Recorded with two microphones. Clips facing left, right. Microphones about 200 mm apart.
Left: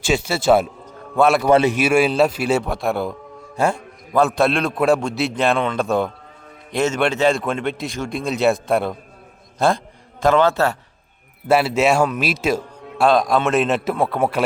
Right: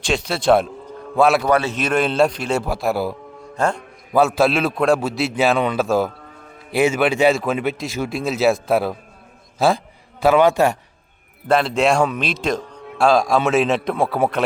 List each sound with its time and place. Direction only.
0.0 s a man's voice: 5° left (ahead or behind)
1.5 s a man's voice: 25° left (ahead or behind)
1.7 s a man's voice: 10° left (ahead or behind)
3.6 s a man's voice: 10° left (ahead or behind)
4.1 s a man's voice: 5° right (ahead or behind)
11.4 s a man's voice: 5° left (ahead or behind)